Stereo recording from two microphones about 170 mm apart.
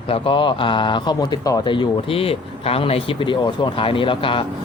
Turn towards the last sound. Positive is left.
turn(degrees=30)  # may be behind; listen again after turning